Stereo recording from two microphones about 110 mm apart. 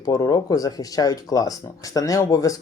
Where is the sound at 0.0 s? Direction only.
35° left (ahead or behind).